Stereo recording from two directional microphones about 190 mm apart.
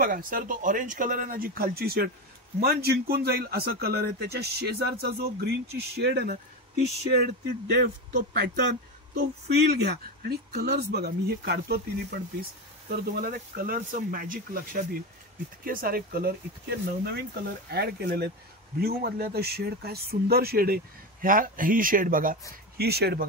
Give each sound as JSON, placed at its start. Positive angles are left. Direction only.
{"t": 0.0, "sound": "speech", "side_deg": -45}
{"t": 7.6, "sound": "speech", "side_deg": -55}
{"t": 13.0, "sound": "speech", "side_deg": -50}
{"t": 22.8, "sound": "speech", "side_deg": -55}